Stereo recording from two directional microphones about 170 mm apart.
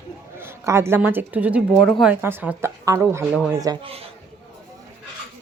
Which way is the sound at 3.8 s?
35° right (ahead or behind).